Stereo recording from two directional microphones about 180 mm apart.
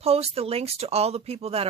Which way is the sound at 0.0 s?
35° right (ahead or behind).